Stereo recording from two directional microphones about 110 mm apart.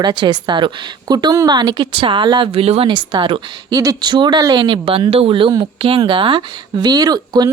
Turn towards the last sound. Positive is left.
turn(degrees=-40)  # may be behind; listen again after turning